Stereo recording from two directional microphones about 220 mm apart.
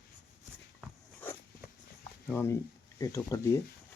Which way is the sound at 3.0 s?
15° left (ahead or behind).